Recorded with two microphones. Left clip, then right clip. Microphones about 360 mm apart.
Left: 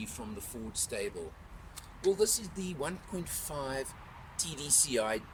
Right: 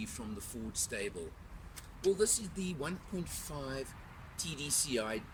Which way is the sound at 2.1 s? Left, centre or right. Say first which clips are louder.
Left 3 dB; centre.